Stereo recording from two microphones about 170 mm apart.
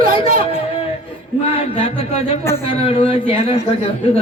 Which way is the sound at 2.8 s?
35° left (ahead or behind).